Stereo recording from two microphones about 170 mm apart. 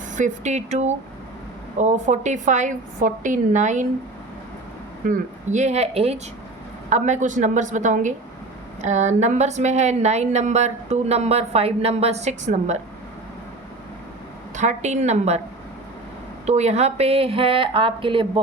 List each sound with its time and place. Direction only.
0.2 s a woman's voice: 45° right (ahead or behind)
5.0 s a woman's voice: 50° right (ahead or behind)
14.5 s a woman's voice: 45° right (ahead or behind)
16.5 s a woman's voice: 40° right (ahead or behind)